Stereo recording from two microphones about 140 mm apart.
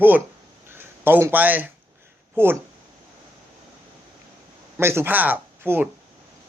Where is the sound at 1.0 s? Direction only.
15° right (ahead or behind).